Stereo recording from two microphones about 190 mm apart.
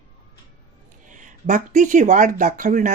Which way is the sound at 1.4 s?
40° right (ahead or behind).